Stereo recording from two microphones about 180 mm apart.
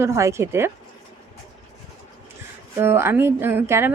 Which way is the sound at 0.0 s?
15° right (ahead or behind).